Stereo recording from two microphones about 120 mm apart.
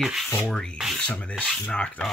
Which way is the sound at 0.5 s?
5° left (ahead or behind).